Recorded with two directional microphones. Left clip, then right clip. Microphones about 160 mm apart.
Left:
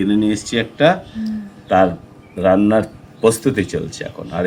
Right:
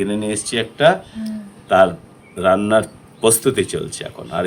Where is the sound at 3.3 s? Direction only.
90° right.